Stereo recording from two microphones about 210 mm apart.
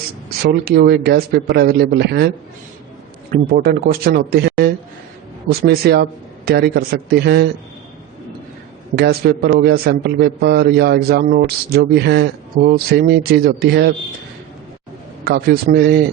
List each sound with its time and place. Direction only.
0.6 s a man's voice: 50° right (ahead or behind)
3.5 s a man's voice: 45° right (ahead or behind)
9.0 s a man's voice: 50° right (ahead or behind)
15.2 s a man's voice: 50° right (ahead or behind)